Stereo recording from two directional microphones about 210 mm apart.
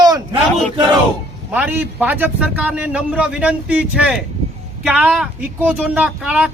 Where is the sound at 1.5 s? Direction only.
10° right (ahead or behind).